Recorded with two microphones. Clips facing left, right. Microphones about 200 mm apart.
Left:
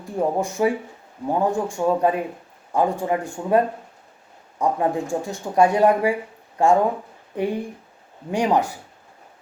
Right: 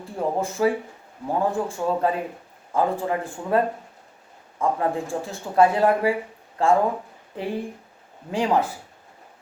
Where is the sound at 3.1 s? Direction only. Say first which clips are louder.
Left 3 dB; 15° left (ahead or behind).